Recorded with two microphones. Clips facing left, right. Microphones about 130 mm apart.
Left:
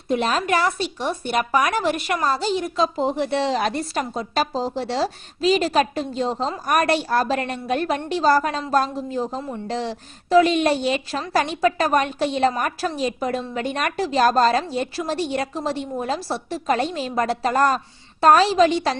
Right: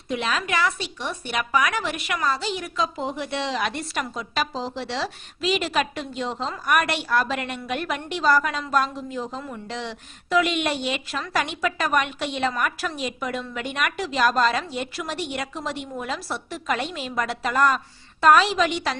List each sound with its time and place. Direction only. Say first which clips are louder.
0.1 s a woman's voice: left 5 dB; 40° left (ahead or behind)